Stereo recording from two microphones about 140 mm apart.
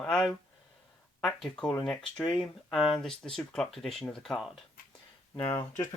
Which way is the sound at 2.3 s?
Centre (ahead or behind).